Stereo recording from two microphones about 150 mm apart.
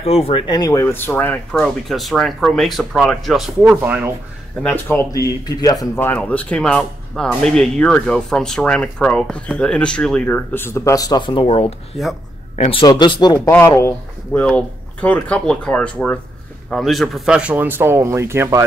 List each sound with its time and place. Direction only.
0.0 s speech: 40° left (ahead or behind); by 1.4 s 10° left (ahead or behind)
1.9 s speech: centre (ahead or behind)
3.7 s speech: 15° right (ahead or behind)
4.6 s speech: 15° left (ahead or behind)
6.0 s speech: 10° left (ahead or behind); by 12.8 s 40° left (ahead or behind)
12.8 s speech: 30° left (ahead or behind)
13.5 s speech: 20° left (ahead or behind); by 18.6 s 15° right (ahead or behind)